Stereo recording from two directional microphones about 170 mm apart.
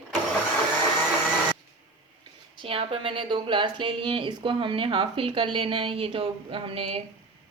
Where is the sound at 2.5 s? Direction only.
30° right (ahead or behind).